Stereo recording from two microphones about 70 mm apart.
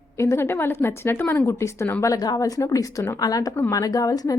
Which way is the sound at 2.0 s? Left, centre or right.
Left.